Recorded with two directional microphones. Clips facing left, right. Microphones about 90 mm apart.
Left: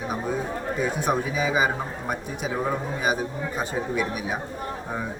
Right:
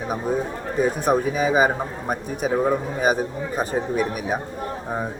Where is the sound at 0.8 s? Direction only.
45° right (ahead or behind).